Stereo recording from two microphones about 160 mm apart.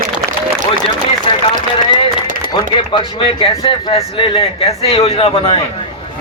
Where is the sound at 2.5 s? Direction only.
30° left (ahead or behind).